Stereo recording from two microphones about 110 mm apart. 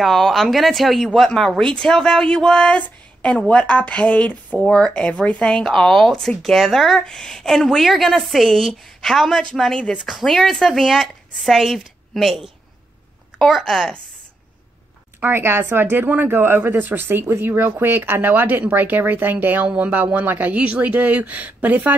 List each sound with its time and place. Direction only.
0.0 s speech: centre (ahead or behind)
15.1 s speech: 20° right (ahead or behind)